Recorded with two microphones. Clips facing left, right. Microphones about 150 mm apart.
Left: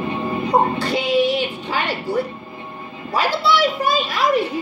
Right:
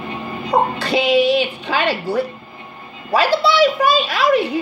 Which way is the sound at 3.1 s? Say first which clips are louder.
Right 3 dB; 80° right.